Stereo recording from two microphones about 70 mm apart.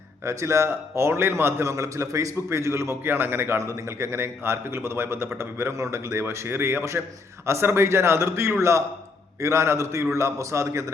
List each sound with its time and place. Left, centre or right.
0.3 s a man's voice: right